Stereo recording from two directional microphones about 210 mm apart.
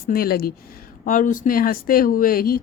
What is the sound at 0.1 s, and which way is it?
Speech, 45° left (ahead or behind).